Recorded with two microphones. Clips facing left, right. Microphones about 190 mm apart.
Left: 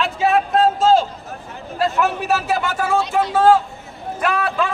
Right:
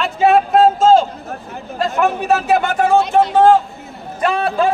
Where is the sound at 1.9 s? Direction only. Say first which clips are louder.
Right 7 dB; 55° right (ahead or behind).